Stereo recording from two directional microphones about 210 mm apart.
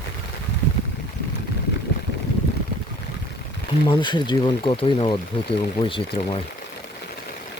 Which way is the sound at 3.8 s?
20° left (ahead or behind).